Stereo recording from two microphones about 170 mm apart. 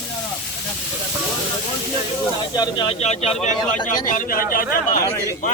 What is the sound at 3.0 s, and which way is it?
Speech, 40° left (ahead or behind).